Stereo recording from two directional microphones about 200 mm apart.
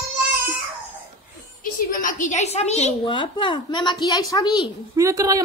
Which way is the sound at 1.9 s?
45° left (ahead or behind).